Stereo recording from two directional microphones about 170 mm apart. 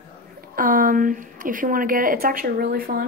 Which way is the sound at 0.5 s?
55° right (ahead or behind).